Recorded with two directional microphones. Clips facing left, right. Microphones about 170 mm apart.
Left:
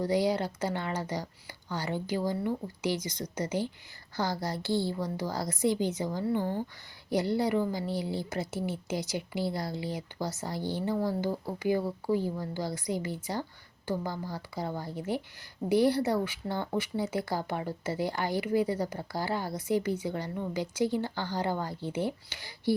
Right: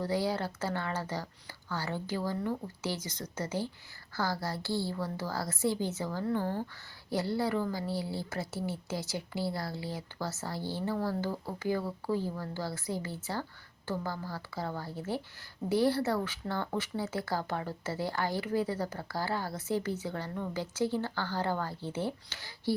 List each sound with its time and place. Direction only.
0.0 s speech: 15° left (ahead or behind)